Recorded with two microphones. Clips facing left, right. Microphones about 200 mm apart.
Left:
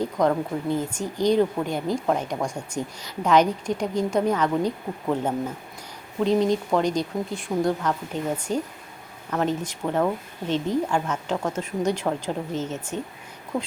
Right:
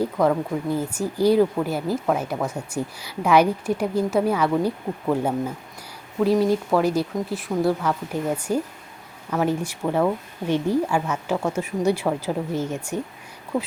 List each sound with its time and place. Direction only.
0.0 s speech: 5° right (ahead or behind)
6.1 s speech: 5° right (ahead or behind)